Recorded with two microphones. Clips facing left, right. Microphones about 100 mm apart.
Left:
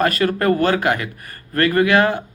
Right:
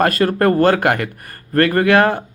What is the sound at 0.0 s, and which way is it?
Speech, 40° right (ahead or behind).